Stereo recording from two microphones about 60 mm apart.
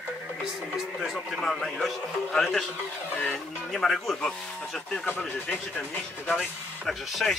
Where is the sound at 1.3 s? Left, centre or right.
Centre.